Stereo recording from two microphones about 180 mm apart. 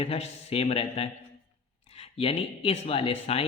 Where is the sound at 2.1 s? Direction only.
30° left (ahead or behind).